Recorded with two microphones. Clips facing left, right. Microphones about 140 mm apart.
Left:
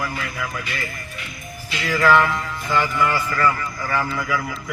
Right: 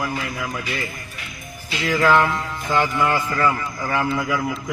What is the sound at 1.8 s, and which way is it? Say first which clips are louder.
A man's voice: even; 20° right (ahead or behind).